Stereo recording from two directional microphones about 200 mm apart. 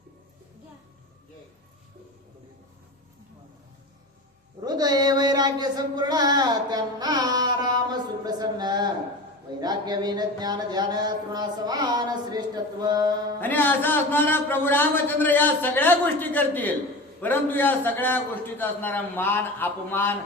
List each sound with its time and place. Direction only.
4.6 s a sound: 20° right (ahead or behind)
9.6 s speech: 20° right (ahead or behind)
13.4 s a man's voice: 10° left (ahead or behind)